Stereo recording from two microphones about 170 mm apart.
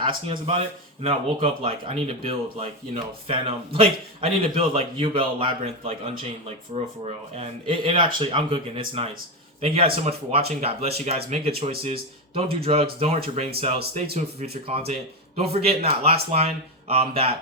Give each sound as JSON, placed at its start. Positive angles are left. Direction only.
{"t": 0.0, "sound": "speech", "side_deg": -30}